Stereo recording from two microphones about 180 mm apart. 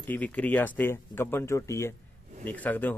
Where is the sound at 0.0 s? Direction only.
10° left (ahead or behind).